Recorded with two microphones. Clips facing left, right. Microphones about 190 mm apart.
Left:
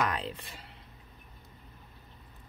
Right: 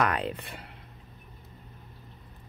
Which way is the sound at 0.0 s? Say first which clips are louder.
Right 4 dB; 65° right (ahead or behind).